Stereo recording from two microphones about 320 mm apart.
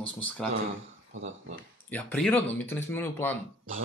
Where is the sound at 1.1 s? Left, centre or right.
Right.